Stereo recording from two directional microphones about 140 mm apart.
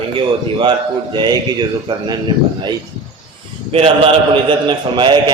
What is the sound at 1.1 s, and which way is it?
A man's voice, 30° right (ahead or behind).